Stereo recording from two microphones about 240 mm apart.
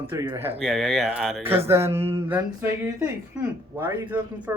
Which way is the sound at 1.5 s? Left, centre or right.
Centre.